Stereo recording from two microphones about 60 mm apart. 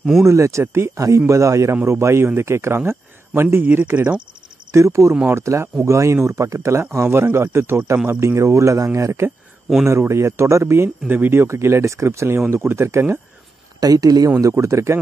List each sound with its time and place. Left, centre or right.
0.2 s speech: right
0.9 s speech: right
1.2 s speech: right
3.6 s speech: right
4.7 s speech: right
7.1 s speech: right
11.1 s speech: right
13.7 s speech: right
14.6 s speech: right